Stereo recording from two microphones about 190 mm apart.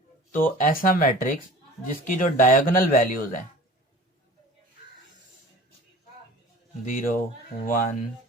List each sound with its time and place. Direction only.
0.3 s speech: 45° left (ahead or behind)
6.8 s speech: 45° left (ahead or behind)